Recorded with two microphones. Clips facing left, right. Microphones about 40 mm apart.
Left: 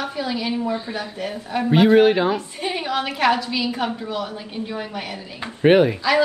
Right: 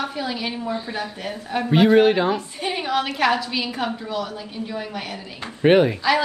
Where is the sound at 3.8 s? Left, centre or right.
Centre.